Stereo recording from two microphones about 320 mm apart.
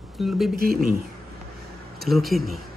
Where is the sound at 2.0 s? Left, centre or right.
Centre.